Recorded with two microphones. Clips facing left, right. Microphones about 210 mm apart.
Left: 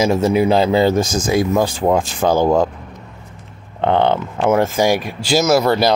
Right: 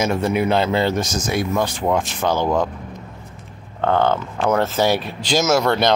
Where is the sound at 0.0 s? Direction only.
30° left (ahead or behind).